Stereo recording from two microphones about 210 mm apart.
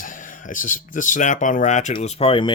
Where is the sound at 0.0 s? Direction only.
40° left (ahead or behind).